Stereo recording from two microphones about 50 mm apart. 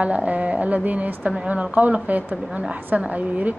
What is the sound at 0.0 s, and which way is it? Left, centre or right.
A woman's voice, right.